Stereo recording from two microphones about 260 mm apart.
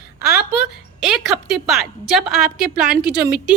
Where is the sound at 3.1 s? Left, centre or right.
Right.